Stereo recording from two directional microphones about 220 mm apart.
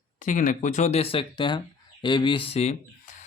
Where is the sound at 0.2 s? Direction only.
35° left (ahead or behind).